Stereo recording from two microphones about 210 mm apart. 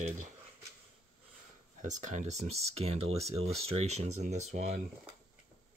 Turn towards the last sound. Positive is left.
turn(degrees=-35)  # may be behind; listen again after turning